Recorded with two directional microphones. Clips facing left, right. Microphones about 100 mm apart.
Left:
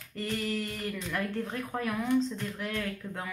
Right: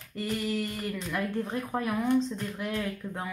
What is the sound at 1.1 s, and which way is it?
Speech, 15° right (ahead or behind).